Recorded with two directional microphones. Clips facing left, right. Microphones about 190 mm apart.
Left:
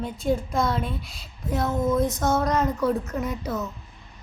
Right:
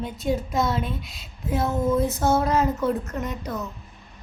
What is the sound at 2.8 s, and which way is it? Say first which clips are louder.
Speech: left 1 dB; centre (ahead or behind).